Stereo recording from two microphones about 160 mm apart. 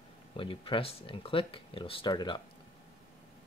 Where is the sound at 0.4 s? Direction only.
35° left (ahead or behind).